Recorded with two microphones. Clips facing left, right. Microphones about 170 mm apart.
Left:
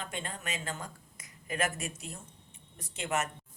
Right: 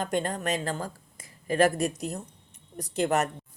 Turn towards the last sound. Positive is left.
turn(degrees=-40)  # may be behind; listen again after turning